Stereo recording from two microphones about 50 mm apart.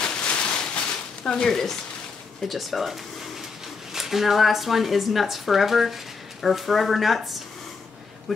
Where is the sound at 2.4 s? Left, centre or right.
Centre.